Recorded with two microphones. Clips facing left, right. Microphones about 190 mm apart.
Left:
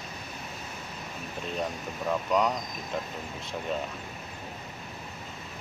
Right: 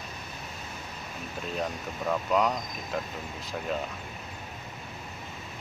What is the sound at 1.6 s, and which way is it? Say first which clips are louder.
Speech: even; centre (ahead or behind).